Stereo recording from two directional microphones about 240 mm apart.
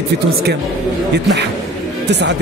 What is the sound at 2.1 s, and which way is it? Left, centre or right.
Speech, right.